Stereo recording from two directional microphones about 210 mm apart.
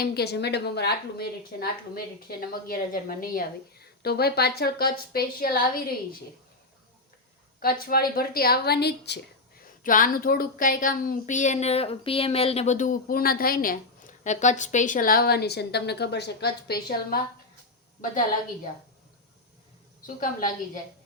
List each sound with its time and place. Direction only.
0.0 s a woman's voice: 50° left (ahead or behind)
7.6 s a woman's voice: 45° left (ahead or behind)
9.8 s speech: 40° left (ahead or behind)
20.0 s speech: 40° left (ahead or behind)